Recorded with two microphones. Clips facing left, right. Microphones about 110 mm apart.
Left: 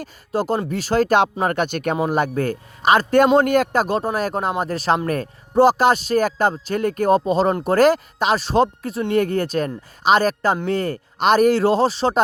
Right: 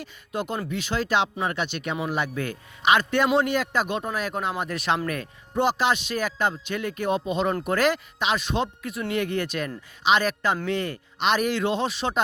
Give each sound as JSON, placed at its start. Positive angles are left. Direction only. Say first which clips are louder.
{"t": 0.0, "sound": "speech", "louder": "left 7 dB", "side_deg": 35}